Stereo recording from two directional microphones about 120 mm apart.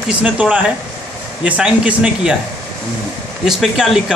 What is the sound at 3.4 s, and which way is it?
Speech, 5° right (ahead or behind).